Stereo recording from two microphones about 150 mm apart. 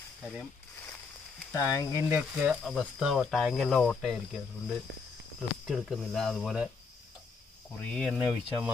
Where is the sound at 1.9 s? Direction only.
20° right (ahead or behind).